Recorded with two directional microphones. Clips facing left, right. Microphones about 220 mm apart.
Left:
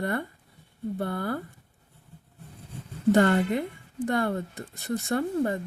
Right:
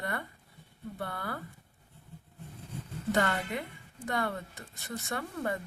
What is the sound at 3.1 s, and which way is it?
A woman's voice, 35° left (ahead or behind).